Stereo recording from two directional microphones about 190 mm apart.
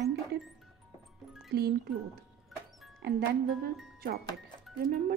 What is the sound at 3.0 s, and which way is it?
Speech, 55° right (ahead or behind).